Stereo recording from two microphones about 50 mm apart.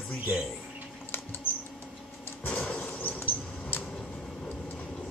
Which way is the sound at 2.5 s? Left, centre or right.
Left.